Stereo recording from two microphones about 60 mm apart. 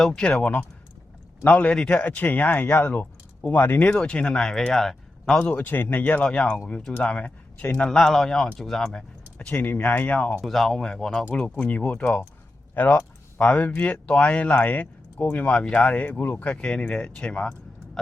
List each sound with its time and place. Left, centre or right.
0.2 s speech: centre
3.9 s speech: centre
5.4 s speech: left
5.6 s speech: left
6.2 s speech: centre
9.5 s speech: left
10.4 s speech: centre
11.5 s speech: left
15.5 s speech: centre